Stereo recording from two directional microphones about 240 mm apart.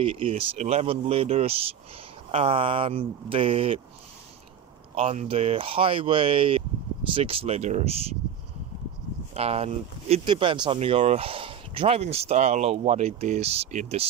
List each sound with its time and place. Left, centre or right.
0.0 s speech: right
4.9 s speech: right
9.3 s speech: right